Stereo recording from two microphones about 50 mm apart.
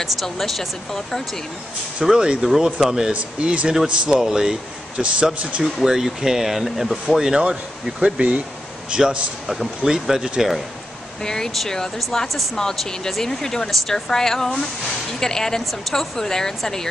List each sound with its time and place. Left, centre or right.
0.0 s speech: centre
2.0 s speech: centre
3.1 s speech: right
5.0 s speech: right
5.6 s speech: centre
11.2 s speech: centre